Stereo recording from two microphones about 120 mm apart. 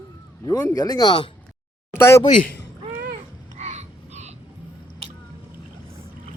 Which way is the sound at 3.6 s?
70° right (ahead or behind).